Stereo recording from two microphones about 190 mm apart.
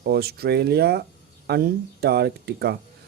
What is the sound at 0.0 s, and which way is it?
Speech, 55° right (ahead or behind).